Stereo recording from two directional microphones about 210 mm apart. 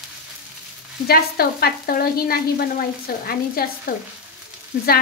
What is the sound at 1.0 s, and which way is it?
Speech, 45° left (ahead or behind).